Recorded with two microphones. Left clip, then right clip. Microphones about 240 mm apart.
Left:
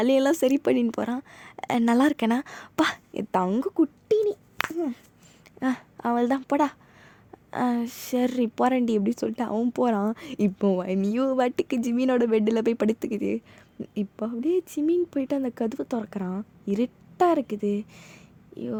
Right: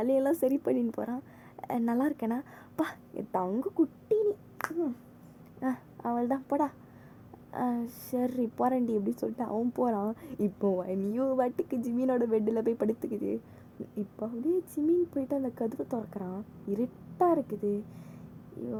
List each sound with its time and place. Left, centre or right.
0.0 s a woman's voice: left